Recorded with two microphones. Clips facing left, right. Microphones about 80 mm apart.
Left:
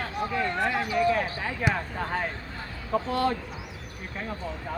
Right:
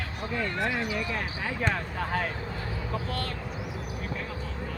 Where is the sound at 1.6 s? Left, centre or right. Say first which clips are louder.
Left 2 dB; centre.